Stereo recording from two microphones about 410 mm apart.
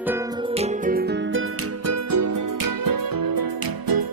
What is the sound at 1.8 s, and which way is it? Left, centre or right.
Music, right.